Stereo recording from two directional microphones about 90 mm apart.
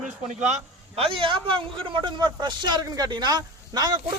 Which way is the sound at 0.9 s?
85° right.